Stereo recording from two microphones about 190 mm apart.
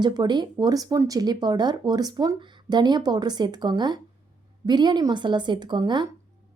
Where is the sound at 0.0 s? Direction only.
20° right (ahead or behind).